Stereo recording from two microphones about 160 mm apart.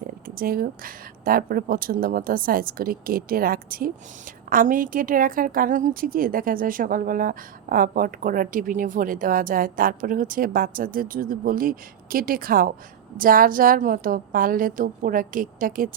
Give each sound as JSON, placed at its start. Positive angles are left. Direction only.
{"t": 0.3, "sound": "a woman's voice", "side_deg": -65}